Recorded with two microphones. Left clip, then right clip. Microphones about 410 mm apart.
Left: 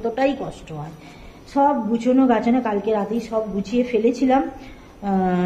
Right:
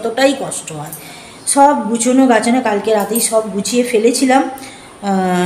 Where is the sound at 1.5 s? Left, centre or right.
Left.